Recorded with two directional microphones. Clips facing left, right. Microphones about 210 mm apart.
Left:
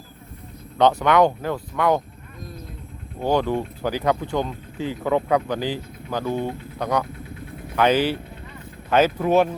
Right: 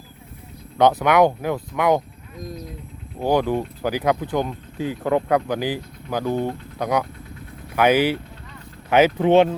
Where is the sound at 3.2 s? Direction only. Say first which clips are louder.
Right 1 dB; 10° right (ahead or behind).